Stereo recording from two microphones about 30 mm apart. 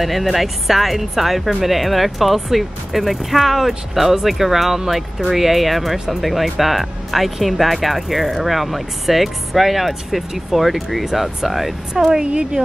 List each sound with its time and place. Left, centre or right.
0.0 s speech: centre
11.9 s speech: right
12.6 s speech: right